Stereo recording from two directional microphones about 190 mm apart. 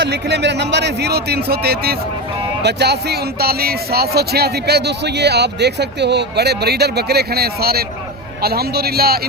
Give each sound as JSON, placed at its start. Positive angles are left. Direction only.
{"t": 0.0, "sound": "speech", "side_deg": -60}